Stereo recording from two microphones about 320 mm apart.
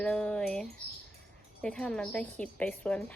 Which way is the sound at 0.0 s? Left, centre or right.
Centre.